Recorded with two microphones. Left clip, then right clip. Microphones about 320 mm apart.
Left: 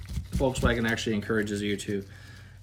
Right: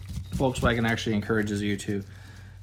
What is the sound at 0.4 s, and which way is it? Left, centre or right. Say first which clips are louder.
Speech: right 1 dB; centre.